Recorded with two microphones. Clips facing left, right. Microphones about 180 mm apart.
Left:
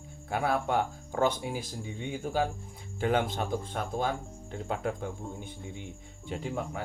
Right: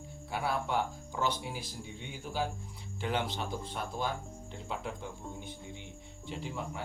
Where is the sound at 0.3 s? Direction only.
50° left (ahead or behind).